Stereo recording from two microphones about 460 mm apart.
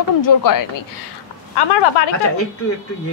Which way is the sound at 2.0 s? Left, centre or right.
Left.